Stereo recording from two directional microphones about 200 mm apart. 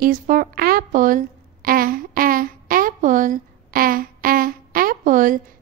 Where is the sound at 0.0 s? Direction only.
45° right (ahead or behind).